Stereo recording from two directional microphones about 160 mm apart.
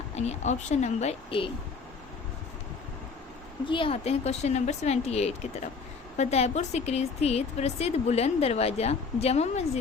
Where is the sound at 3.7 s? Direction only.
35° left (ahead or behind).